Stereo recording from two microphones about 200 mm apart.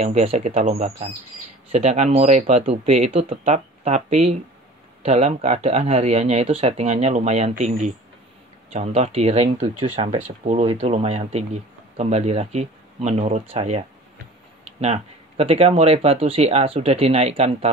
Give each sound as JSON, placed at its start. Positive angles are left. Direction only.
{"t": 0.0, "sound": "speech", "side_deg": -35}